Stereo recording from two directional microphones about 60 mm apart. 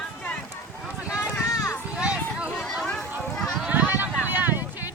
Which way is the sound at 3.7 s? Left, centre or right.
Right.